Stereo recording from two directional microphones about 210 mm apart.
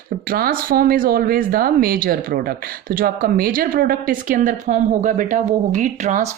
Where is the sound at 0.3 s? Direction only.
45° right (ahead or behind).